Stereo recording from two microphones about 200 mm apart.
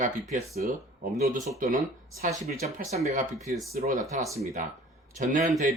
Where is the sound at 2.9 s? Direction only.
35° right (ahead or behind).